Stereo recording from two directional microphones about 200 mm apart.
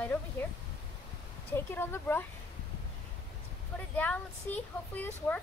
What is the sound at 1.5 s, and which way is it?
Speech, 10° left (ahead or behind).